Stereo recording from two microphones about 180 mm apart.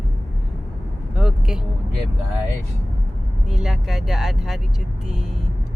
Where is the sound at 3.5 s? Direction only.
Centre (ahead or behind).